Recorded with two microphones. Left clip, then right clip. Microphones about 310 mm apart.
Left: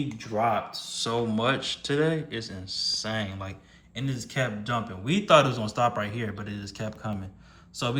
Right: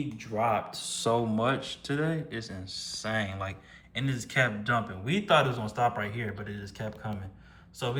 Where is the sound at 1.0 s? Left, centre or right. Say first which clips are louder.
Left 1 dB; centre.